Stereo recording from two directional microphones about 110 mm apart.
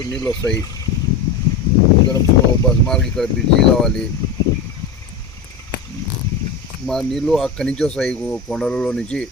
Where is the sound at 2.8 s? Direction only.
5° left (ahead or behind).